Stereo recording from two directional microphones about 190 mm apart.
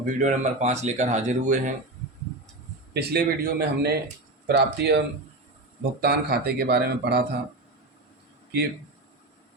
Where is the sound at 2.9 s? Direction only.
60° right (ahead or behind).